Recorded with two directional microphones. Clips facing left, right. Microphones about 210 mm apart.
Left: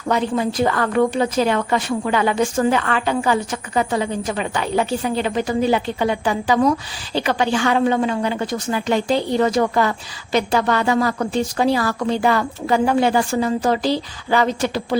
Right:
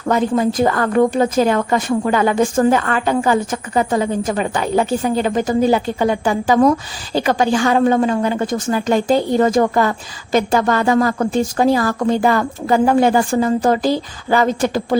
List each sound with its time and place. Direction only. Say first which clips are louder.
0.1 s a woman's voice: right 4 dB; 45° right (ahead or behind)